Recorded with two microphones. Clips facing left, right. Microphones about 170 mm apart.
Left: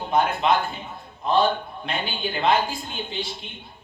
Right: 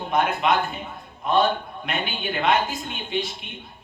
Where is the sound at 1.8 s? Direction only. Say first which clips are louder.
Even; 30° left (ahead or behind).